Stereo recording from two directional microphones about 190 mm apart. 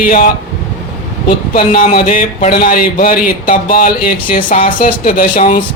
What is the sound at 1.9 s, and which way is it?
Speech, 45° left (ahead or behind).